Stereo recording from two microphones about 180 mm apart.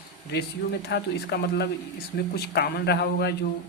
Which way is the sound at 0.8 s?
65° left (ahead or behind).